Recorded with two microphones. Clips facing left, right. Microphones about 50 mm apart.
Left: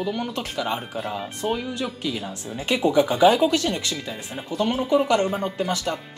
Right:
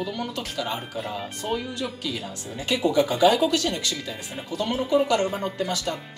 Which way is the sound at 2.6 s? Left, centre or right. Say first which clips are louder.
Left 2 dB; left.